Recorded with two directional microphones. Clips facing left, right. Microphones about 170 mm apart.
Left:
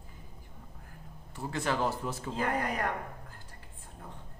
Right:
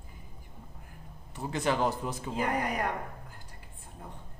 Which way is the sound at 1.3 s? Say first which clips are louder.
Right 2 dB; 20° right (ahead or behind).